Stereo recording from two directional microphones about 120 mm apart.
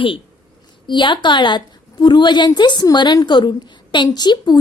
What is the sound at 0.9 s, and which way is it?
A woman's voice, 40° left (ahead or behind).